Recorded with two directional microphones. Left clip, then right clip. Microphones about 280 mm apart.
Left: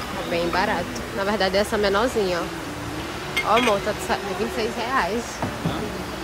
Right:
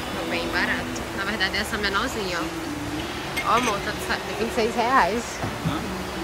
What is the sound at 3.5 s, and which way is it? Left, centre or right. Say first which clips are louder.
Speech: left 3 dB; centre.